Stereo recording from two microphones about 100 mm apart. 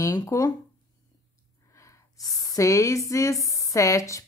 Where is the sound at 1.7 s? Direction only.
30° left (ahead or behind).